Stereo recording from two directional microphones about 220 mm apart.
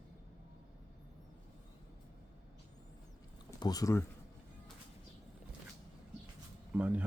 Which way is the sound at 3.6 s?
15° left (ahead or behind).